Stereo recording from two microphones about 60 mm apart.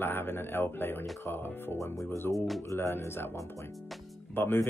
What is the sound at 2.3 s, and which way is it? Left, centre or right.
Speech, centre.